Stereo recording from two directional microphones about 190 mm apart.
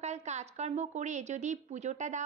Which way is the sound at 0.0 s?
35° right (ahead or behind).